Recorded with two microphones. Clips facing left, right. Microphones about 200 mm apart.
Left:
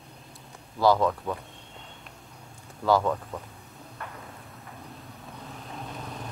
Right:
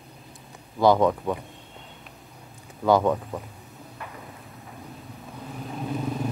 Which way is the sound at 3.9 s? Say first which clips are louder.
Right 1 dB; 5° right (ahead or behind).